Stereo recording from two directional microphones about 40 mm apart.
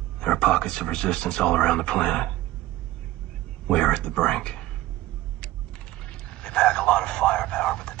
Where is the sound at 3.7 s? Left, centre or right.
Left.